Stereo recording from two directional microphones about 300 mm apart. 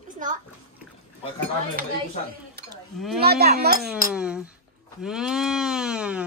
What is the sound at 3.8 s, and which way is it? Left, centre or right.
Speech, centre.